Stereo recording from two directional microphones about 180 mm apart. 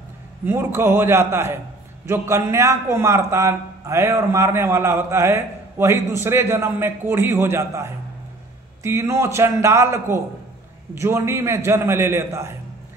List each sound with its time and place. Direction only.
0.5 s a man's voice: 15° right (ahead or behind)